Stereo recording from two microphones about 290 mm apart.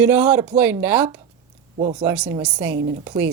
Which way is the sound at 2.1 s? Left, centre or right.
Centre.